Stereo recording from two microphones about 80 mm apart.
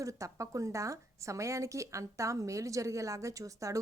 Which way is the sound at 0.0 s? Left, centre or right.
Right.